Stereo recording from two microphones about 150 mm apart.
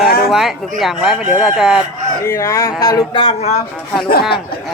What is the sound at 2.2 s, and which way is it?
Speech, 20° left (ahead or behind).